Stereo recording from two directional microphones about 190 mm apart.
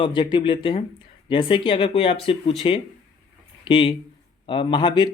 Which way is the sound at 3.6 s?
25° left (ahead or behind).